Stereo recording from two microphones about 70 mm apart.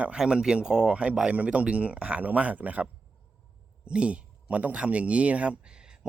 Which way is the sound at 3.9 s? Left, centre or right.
Centre.